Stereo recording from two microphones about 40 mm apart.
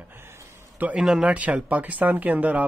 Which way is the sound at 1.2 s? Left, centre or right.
Right.